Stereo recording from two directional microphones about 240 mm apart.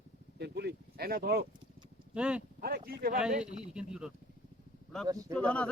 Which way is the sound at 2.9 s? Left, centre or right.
Right.